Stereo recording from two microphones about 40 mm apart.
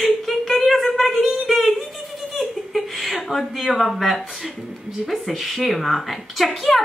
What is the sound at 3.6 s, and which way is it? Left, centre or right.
Speech, centre.